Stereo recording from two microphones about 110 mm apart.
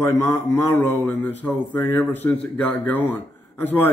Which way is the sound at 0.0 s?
25° left (ahead or behind).